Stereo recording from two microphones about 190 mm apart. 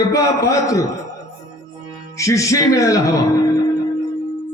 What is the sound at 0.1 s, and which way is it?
Mantra, 15° left (ahead or behind).